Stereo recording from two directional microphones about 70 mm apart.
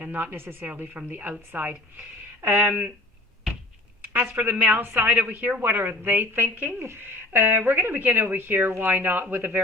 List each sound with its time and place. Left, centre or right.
0.0 s a woman's voice: right
4.0 s a woman's voice: right